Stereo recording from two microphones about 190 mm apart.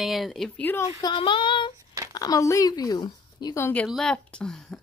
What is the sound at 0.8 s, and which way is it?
A woman's voice, 25° left (ahead or behind).